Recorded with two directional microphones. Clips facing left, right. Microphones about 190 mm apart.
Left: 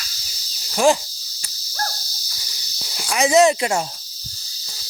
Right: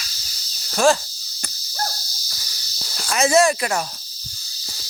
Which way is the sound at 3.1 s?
15° left (ahead or behind).